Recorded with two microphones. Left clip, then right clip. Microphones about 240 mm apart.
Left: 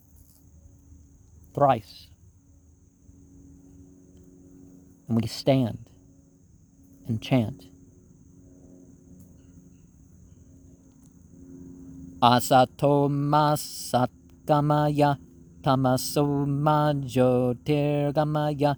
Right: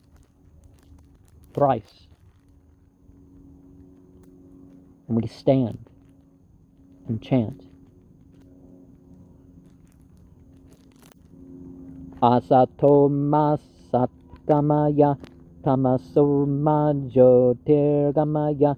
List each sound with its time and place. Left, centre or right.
1.5 s speech: left
5.0 s speech: left
7.0 s speech: left
12.2 s speech: left
15.6 s mantra: left